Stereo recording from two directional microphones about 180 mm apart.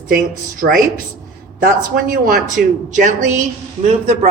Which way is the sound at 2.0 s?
50° right (ahead or behind).